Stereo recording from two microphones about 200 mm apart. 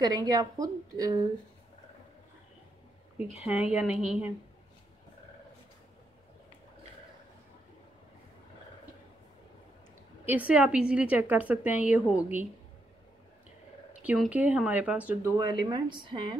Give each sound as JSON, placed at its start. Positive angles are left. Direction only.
{"t": 0.0, "sound": "a woman's voice", "side_deg": -20}
{"t": 3.4, "sound": "speech", "side_deg": -5}
{"t": 10.2, "sound": "a woman's voice", "side_deg": -10}
{"t": 14.0, "sound": "a woman's voice", "side_deg": -5}
{"t": 15.3, "sound": "a woman's voice", "side_deg": -20}